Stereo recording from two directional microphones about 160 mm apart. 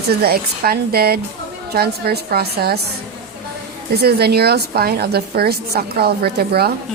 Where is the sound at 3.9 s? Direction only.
80° right.